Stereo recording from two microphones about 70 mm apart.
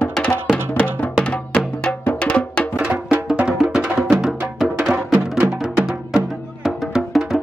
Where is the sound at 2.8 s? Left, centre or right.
Centre.